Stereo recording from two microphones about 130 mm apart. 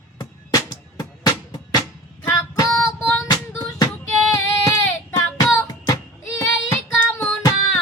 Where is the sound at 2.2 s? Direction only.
25° left (ahead or behind).